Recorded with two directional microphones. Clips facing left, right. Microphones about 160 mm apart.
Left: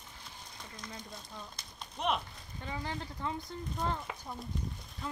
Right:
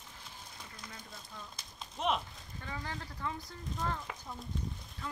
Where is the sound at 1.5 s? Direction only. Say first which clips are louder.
Even; centre (ahead or behind).